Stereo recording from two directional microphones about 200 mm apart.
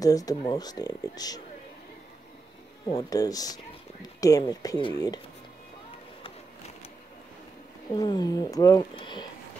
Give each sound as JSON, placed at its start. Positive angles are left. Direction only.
{"t": 0.0, "sound": "speech", "side_deg": 20}
{"t": 2.9, "sound": "speech", "side_deg": 20}
{"t": 7.9, "sound": "speech", "side_deg": 20}